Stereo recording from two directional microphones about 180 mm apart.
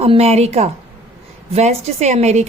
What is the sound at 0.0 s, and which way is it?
A woman's voice, 35° right (ahead or behind).